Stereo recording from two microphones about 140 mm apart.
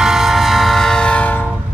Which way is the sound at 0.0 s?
5° right (ahead or behind).